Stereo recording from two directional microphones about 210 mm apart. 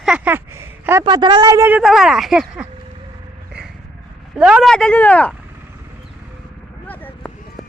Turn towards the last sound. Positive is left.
turn(degrees=10)  # may be behind; listen again after turning